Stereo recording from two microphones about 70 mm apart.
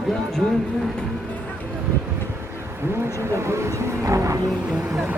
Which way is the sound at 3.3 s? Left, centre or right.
Right.